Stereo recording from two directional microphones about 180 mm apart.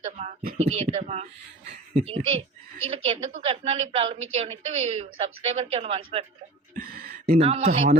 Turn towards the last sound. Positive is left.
turn(degrees=-40)  # may be behind; listen again after turning